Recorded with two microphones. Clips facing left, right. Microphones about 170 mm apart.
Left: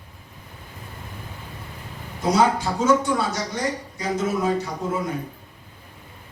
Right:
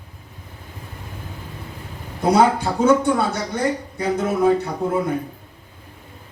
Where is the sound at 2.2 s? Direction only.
60° right (ahead or behind).